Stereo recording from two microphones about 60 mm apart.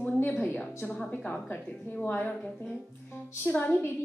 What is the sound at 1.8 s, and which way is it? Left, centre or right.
Speech, left.